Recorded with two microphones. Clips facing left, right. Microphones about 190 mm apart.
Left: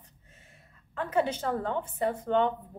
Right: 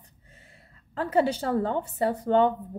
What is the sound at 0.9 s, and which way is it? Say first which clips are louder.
A woman's voice: right 4 dB; 35° right (ahead or behind).